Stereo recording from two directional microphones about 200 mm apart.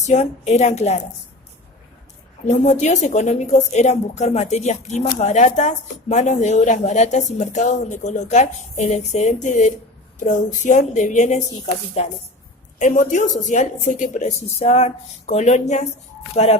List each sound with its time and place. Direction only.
0.0 s a woman's voice: 35° left (ahead or behind)
2.4 s a woman's voice: 35° left (ahead or behind)